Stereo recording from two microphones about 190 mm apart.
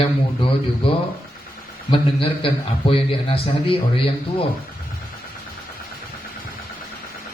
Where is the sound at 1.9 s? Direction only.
30° left (ahead or behind).